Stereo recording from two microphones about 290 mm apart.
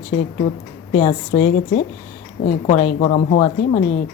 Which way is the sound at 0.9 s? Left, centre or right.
Left.